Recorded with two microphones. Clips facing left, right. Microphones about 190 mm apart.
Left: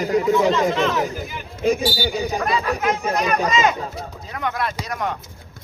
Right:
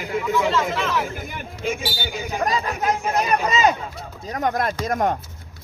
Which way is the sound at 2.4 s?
35° right (ahead or behind).